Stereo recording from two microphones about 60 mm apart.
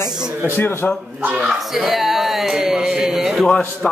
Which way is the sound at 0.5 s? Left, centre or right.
Left.